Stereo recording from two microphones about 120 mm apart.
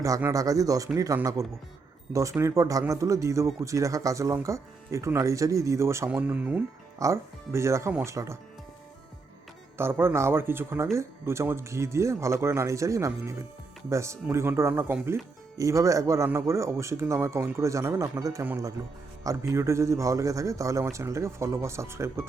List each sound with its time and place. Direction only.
0.2 s speech: 25° right (ahead or behind)
7.0 s speech: 25° right (ahead or behind)
9.7 s speech: 20° right (ahead or behind)